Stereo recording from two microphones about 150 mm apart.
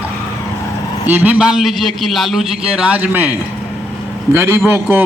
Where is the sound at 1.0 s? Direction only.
10° right (ahead or behind).